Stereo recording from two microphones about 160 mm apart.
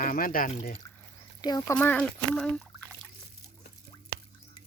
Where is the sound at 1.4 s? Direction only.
25° left (ahead or behind).